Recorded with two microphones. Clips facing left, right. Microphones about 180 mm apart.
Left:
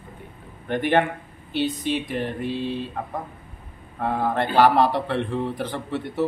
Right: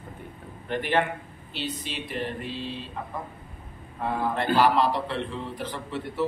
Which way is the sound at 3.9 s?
55° left (ahead or behind).